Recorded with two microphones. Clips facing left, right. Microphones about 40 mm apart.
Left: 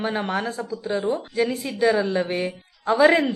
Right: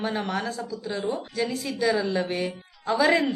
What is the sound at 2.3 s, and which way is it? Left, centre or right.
Speech, left.